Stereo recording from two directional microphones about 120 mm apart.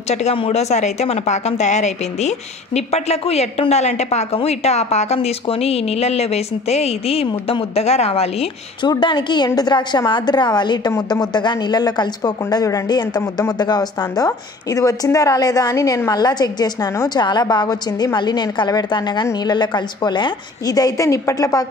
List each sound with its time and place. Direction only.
0.1 s speech: 65° left (ahead or behind)
8.8 s speech: 40° left (ahead or behind)